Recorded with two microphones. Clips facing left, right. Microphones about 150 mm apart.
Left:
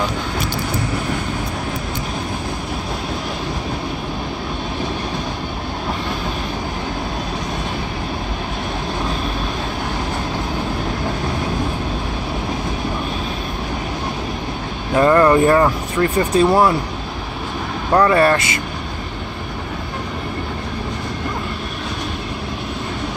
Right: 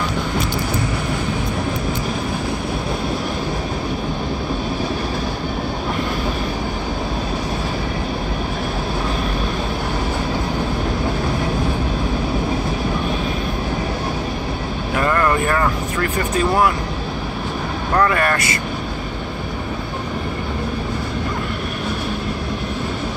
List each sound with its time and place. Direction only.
15.0 s vehicle: 20° left (ahead or behind)
16.3 s speech: 30° left (ahead or behind)
17.9 s speech: 25° left (ahead or behind)